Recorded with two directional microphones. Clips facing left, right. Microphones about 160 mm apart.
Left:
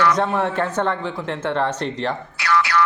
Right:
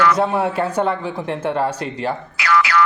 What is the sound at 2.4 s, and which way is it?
Boing, 90° right.